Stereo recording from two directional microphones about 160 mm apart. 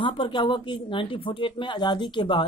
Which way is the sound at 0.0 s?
30° left (ahead or behind).